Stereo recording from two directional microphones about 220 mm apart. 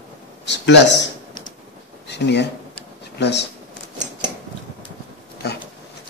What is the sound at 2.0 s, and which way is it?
Speech, 50° left (ahead or behind).